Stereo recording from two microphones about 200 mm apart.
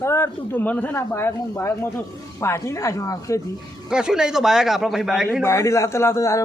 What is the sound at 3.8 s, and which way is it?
A man's voice, 5° right (ahead or behind).